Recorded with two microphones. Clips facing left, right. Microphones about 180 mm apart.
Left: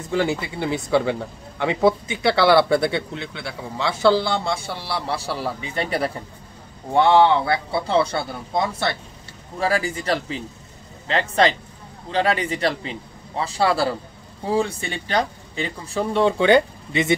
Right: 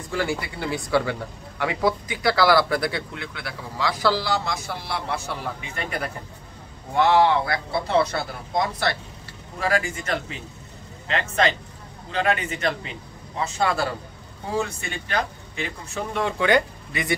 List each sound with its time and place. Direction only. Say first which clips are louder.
0.1 s speech: left 4 dB; 20° left (ahead or behind)